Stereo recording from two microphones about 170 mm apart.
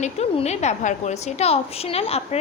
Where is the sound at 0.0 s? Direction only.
40° left (ahead or behind).